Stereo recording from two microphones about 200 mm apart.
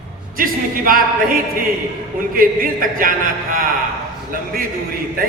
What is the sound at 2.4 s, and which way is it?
A man's voice, 45° right (ahead or behind).